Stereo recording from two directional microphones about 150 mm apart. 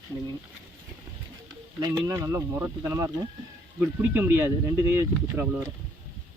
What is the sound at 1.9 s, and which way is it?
Speech, 20° right (ahead or behind).